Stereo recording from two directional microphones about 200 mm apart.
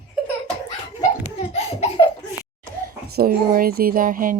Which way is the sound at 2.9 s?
50° right (ahead or behind).